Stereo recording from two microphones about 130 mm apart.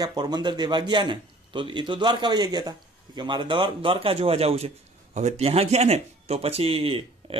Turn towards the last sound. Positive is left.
turn(degrees=-45)  # may be behind; listen again after turning